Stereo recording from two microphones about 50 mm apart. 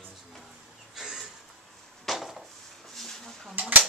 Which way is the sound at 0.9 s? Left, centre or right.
Centre.